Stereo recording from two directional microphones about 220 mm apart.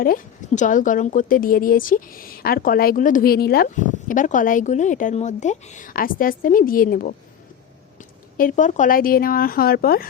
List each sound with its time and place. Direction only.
0.0 s a woman's voice: 35° left (ahead or behind)
8.4 s a woman's voice: 35° left (ahead or behind)